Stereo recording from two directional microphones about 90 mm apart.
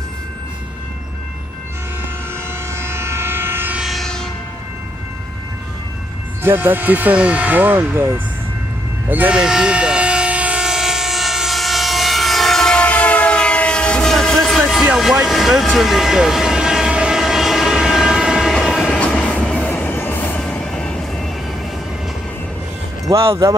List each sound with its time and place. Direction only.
2.7 s train: 30° right (ahead or behind)
3.8 s train: centre (ahead or behind)
6.4 s speech: 20° right (ahead or behind)
9.4 s train: 10° right (ahead or behind)
15.0 s vehicle: centre (ahead or behind)
18.9 s train: 15° left (ahead or behind)
23.0 s speech: 30° right (ahead or behind)